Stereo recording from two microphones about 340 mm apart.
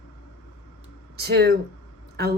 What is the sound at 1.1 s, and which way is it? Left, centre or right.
Speech, right.